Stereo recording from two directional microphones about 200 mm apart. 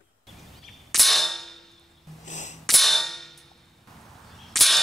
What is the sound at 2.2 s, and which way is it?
Sneeze, 35° left (ahead or behind).